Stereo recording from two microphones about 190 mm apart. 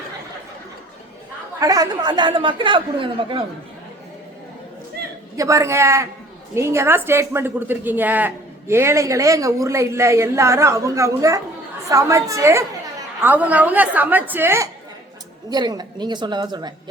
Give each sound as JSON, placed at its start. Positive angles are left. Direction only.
{"t": 1.5, "sound": "speech", "side_deg": -20}
{"t": 5.0, "sound": "a sound", "side_deg": -55}
{"t": 5.4, "sound": "a woman's voice", "side_deg": -15}